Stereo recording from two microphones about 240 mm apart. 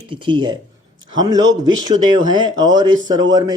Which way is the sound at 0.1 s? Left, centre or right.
Centre.